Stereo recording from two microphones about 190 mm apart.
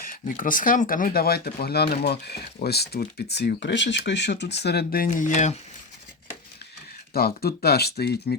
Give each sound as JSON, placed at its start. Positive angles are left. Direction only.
{"t": 0.0, "sound": "speech", "side_deg": 45}
{"t": 7.1, "sound": "speech", "side_deg": 55}